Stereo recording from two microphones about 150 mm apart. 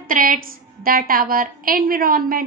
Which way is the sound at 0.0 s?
70° right (ahead or behind).